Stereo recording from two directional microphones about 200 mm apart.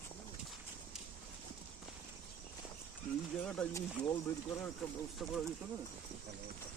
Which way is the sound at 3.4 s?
5° left (ahead or behind).